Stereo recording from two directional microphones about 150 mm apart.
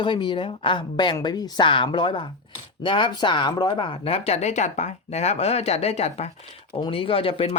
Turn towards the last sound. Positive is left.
turn(degrees=40)  # may be behind; listen again after turning